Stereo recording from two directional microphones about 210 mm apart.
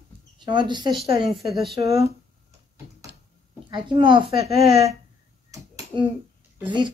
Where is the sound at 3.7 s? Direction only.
20° right (ahead or behind).